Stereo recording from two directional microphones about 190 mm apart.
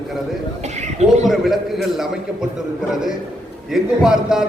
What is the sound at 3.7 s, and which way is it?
Speech, centre (ahead or behind).